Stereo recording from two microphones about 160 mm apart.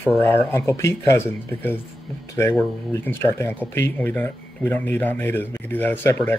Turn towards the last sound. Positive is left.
turn(degrees=10)  # may be behind; listen again after turning